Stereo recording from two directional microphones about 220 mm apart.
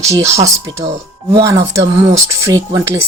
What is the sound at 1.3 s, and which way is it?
Speech, 20° right (ahead or behind).